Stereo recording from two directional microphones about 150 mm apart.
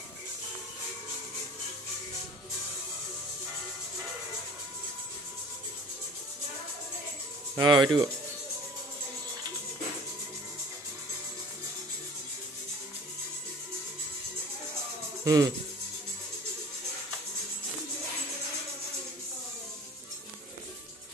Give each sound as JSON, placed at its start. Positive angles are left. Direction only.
{"t": 7.5, "sound": "speech", "side_deg": -30}
{"t": 15.2, "sound": "speech", "side_deg": -25}